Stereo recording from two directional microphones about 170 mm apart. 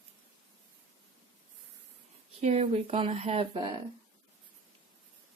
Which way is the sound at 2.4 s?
40° right (ahead or behind).